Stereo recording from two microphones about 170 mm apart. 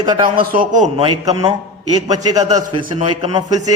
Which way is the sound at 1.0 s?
25° right (ahead or behind).